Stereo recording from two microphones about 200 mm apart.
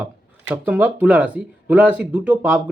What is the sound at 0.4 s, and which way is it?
Speech, 10° right (ahead or behind).